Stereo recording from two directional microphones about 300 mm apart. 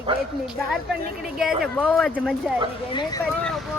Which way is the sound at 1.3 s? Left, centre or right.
Centre.